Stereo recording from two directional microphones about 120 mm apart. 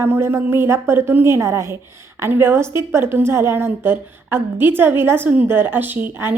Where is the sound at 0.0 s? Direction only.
20° right (ahead or behind).